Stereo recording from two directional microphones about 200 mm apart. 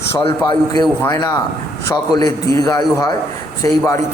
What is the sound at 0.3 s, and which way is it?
A man's voice, 20° left (ahead or behind).